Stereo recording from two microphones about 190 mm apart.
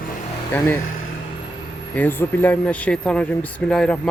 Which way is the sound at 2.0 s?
10° left (ahead or behind).